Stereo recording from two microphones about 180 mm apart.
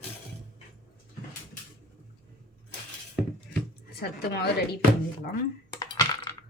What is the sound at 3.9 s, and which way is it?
Speech, 60° left (ahead or behind).